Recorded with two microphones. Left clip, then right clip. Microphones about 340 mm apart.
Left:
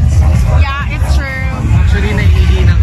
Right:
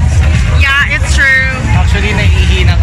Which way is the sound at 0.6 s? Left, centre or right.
Centre.